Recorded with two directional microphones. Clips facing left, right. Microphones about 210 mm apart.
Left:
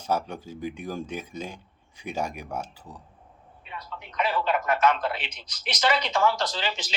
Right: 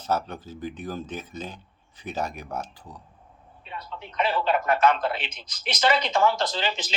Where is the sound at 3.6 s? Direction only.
30° right (ahead or behind).